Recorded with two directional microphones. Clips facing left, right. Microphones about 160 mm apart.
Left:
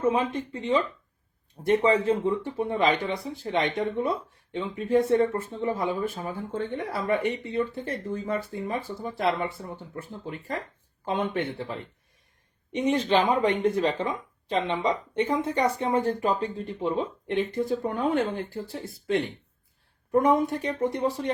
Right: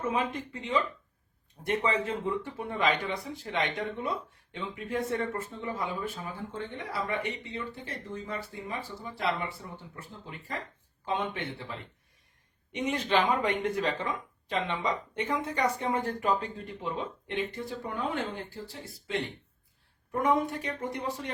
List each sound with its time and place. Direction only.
0.0 s speech: 35° left (ahead or behind)
6.7 s speech: 50° left (ahead or behind)
12.7 s speech: 30° left (ahead or behind)
17.3 s speech: 45° left (ahead or behind)
20.1 s speech: 40° left (ahead or behind)